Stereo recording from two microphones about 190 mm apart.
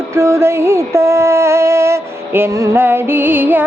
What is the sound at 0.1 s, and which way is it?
Music, 15° right (ahead or behind).